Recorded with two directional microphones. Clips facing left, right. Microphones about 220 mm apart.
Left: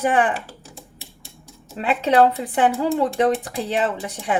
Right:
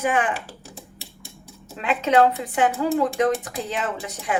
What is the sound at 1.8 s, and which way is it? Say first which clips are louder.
A woman's voice: left 2 dB; 35° left (ahead or behind).